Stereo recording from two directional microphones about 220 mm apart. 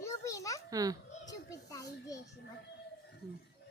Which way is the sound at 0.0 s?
15° left (ahead or behind).